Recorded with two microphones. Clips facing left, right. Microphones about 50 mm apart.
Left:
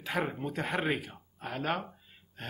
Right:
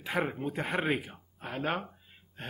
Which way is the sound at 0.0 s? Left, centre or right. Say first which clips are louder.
Right 1 dB; centre.